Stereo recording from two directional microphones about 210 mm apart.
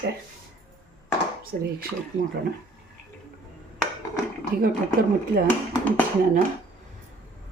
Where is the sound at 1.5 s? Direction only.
40° right (ahead or behind).